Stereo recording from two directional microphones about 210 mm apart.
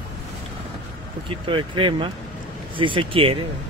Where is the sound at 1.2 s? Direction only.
25° right (ahead or behind).